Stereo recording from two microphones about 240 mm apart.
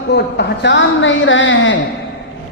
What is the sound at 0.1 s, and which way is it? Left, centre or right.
A man's voice, left.